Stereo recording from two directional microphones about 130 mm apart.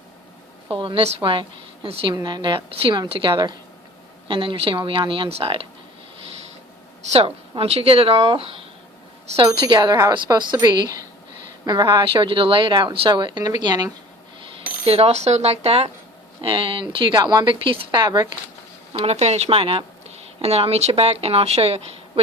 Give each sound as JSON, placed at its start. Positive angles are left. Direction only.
{"t": 0.7, "sound": "speech", "side_deg": -40}
{"t": 2.1, "sound": "a woman's voice", "side_deg": -35}
{"t": 7.1, "sound": "a woman's voice", "side_deg": -50}
{"t": 14.6, "sound": "a woman's voice", "side_deg": -50}
{"t": 18.9, "sound": "a woman's voice", "side_deg": -55}